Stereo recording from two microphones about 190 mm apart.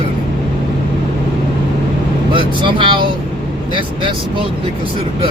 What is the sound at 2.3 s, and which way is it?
Speech, 25° right (ahead or behind).